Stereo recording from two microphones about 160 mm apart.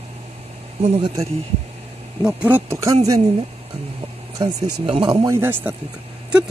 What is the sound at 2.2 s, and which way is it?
Speech, 5° right (ahead or behind).